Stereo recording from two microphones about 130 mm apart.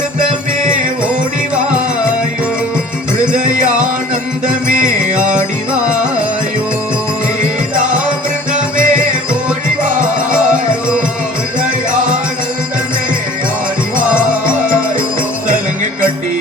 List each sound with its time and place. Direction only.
4.4 s music: 90° right
8.8 s music: 90° right